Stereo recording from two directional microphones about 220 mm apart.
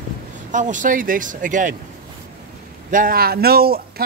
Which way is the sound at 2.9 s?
40° right (ahead or behind).